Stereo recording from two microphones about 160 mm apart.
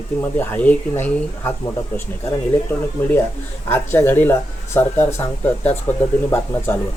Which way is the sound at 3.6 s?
15° left (ahead or behind).